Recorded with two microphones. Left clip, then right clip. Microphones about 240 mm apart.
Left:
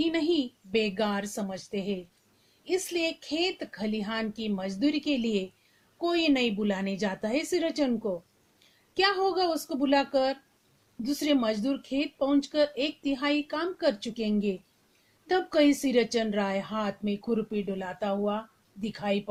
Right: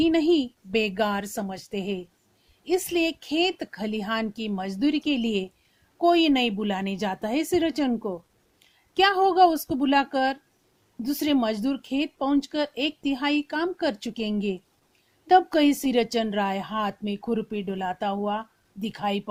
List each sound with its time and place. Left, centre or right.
0.0 s a woman's voice: right